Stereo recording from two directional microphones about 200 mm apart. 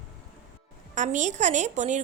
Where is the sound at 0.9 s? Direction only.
40° right (ahead or behind).